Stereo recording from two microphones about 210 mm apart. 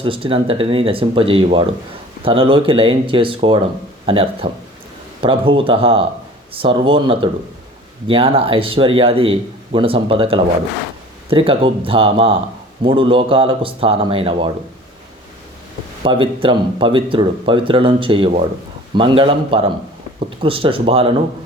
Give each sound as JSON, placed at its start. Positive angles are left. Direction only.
{"t": 0.0, "sound": "a man's voice", "side_deg": -25}
{"t": 16.0, "sound": "a man's voice", "side_deg": -25}